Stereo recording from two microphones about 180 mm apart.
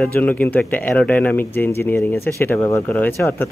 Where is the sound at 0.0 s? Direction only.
10° left (ahead or behind).